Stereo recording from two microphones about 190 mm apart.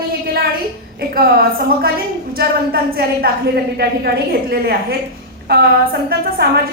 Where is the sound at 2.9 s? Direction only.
55° right (ahead or behind).